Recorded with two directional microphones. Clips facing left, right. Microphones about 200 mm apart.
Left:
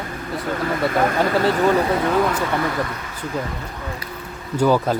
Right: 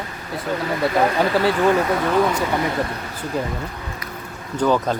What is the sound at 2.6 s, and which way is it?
Speech, 25° right (ahead or behind).